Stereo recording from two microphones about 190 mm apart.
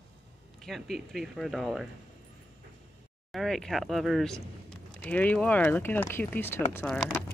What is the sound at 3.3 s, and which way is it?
Speech, centre (ahead or behind).